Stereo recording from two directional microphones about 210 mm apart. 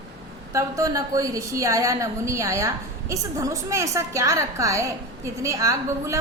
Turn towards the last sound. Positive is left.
turn(degrees=-15)  # may be behind; listen again after turning